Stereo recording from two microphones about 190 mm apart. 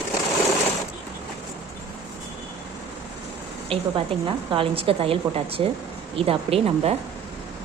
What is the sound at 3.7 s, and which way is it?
A woman's voice, 30° right (ahead or behind).